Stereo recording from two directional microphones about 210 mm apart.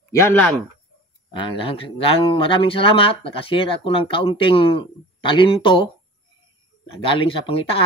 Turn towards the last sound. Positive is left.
turn(degrees=25)  # may be behind; listen again after turning